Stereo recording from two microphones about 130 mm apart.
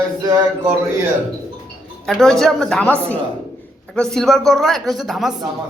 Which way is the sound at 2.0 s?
Centre (ahead or behind).